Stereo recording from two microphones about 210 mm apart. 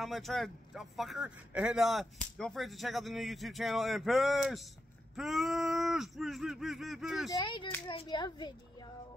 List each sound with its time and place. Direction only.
0.0 s speech: centre (ahead or behind)
7.2 s a child's voice: 20° left (ahead or behind)